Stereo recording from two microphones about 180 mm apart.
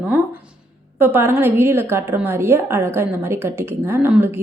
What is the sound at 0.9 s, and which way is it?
A woman's voice, 10° right (ahead or behind).